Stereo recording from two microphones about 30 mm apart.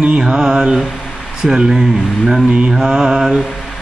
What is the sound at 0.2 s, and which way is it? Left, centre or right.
Speech, right.